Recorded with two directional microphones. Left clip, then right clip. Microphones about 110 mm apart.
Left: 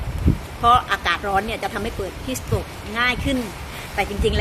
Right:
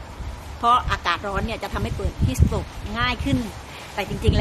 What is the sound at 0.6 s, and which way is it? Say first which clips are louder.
A woman's voice: left 3 dB; 15° right (ahead or behind).